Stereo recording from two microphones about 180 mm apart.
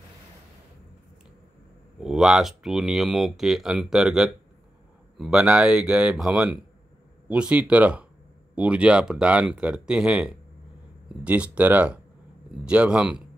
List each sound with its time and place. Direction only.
2.0 s speech: 5° right (ahead or behind)